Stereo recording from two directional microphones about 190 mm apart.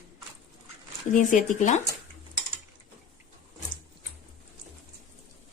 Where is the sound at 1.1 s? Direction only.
45° left (ahead or behind).